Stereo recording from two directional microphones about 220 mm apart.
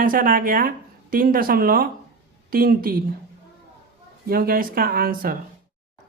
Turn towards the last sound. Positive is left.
turn(degrees=-40)  # may be behind; listen again after turning